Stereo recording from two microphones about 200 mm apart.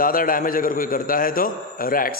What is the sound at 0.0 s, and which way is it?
A man's voice, 45° left (ahead or behind).